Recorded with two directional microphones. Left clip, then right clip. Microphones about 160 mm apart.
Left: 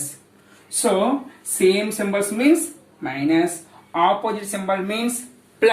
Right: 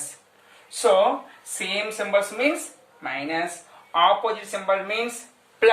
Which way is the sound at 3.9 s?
15° right (ahead or behind).